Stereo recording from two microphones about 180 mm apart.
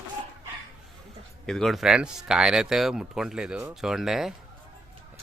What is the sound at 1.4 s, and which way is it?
Speech, centre (ahead or behind).